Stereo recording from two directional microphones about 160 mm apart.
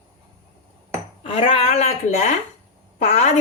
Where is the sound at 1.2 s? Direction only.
40° left (ahead or behind).